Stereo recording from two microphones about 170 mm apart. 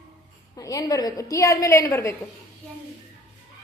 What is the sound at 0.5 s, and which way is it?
A woman's voice, 20° left (ahead or behind).